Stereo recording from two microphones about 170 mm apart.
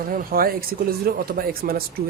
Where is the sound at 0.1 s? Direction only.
60° right (ahead or behind).